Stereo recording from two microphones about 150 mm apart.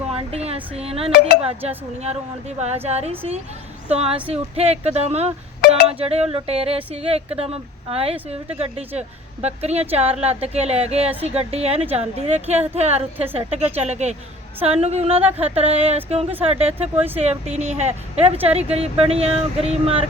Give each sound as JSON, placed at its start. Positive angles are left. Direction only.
{"t": 0.1, "sound": "a sound", "side_deg": -40}
{"t": 1.4, "sound": "a woman's voice", "side_deg": -45}
{"t": 5.6, "sound": "speech", "side_deg": 90}
{"t": 5.9, "sound": "a woman's voice", "side_deg": -40}